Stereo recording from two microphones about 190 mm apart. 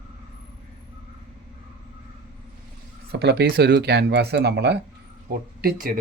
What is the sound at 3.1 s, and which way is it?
Speech, 60° right (ahead or behind).